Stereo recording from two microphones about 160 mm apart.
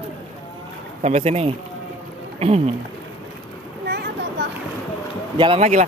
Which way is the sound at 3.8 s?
90° right.